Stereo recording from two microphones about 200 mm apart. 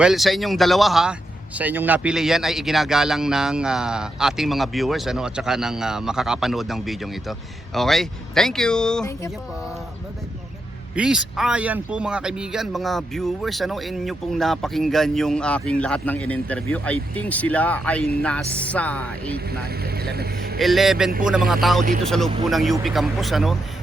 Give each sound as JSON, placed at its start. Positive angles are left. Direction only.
{"t": 0.0, "sound": "a man's voice", "side_deg": 0}
{"t": 10.9, "sound": "a man's voice", "side_deg": -5}
{"t": 19.5, "sound": "speech", "side_deg": -50}
{"t": 20.6, "sound": "a man's voice", "side_deg": 0}